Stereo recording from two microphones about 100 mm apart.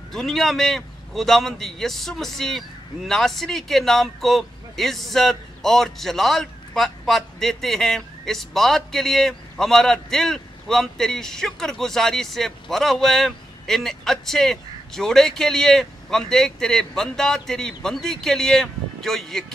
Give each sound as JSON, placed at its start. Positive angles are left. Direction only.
{"t": 0.1, "sound": "a man's voice", "side_deg": 5}